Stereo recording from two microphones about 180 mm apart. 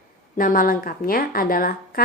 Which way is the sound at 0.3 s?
50° left (ahead or behind).